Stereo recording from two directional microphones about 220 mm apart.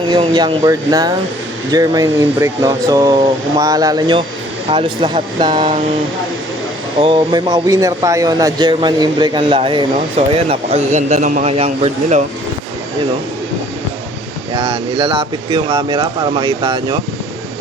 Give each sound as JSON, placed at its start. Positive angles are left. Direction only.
{"t": 0.1, "sound": "a man's voice", "side_deg": -20}
{"t": 7.0, "sound": "a man's voice", "side_deg": -20}
{"t": 14.5, "sound": "a man's voice", "side_deg": -30}